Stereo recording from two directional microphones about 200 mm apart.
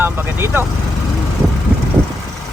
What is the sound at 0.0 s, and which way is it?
Speech, 10° right (ahead or behind).